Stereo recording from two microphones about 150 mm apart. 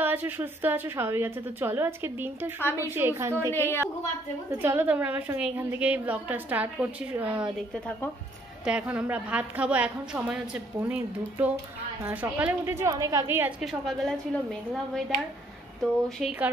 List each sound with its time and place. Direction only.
0.0 s a woman's voice: 10° right (ahead or behind)
3.5 s a woman's voice: 15° left (ahead or behind)
4.5 s a woman's voice: 15° right (ahead or behind)
8.6 s a woman's voice: 5° right (ahead or behind)
13.6 s a woman's voice: centre (ahead or behind)